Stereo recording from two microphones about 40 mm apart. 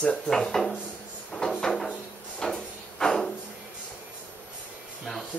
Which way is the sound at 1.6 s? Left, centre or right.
Centre.